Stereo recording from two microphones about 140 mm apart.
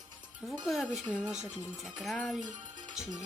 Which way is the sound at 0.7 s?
Centre (ahead or behind).